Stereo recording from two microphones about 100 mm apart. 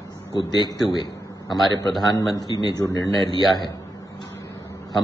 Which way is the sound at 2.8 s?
35° left (ahead or behind).